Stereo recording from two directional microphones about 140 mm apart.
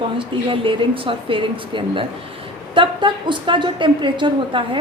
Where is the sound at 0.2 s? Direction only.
40° right (ahead or behind).